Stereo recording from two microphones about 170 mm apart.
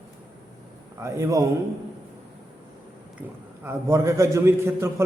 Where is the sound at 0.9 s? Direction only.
15° right (ahead or behind).